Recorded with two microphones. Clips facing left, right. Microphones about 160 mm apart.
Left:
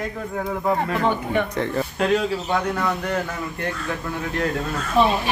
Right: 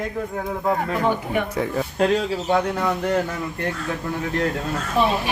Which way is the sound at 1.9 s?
35° right (ahead or behind).